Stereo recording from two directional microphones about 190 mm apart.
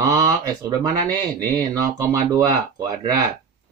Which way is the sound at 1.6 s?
15° right (ahead or behind).